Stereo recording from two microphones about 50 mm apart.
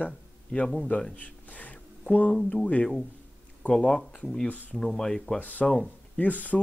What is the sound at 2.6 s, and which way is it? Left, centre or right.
Speech, left.